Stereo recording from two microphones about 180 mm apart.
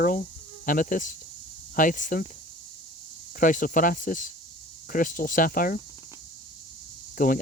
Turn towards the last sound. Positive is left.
turn(degrees=50)  # may be behind; listen again after turning